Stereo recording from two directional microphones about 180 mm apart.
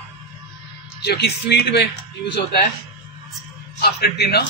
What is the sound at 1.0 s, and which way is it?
Speech, 65° left (ahead or behind).